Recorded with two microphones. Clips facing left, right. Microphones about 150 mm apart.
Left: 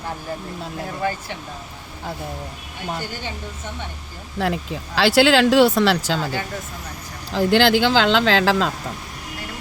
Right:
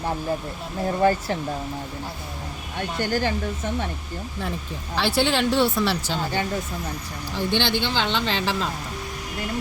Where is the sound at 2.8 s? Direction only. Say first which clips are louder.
Right 5 dB; 75° right (ahead or behind).